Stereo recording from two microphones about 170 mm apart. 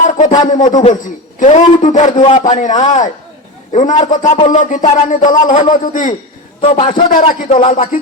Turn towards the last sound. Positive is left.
turn(degrees=35)  # may be behind; listen again after turning